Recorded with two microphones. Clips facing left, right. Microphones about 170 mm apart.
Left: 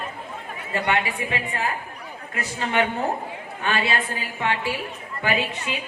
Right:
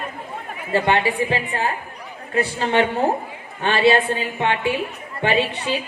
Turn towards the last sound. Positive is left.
turn(degrees=-30)  # may be behind; listen again after turning